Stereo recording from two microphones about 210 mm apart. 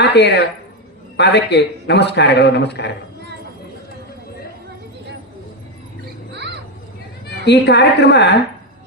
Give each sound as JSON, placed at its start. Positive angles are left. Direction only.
{"t": 0.0, "sound": "a man's voice", "side_deg": 50}
{"t": 7.4, "sound": "a man's voice", "side_deg": 55}